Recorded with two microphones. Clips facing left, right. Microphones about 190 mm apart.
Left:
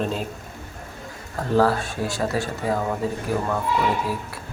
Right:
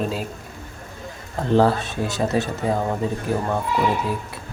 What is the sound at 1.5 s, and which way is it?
Speech, 20° right (ahead or behind).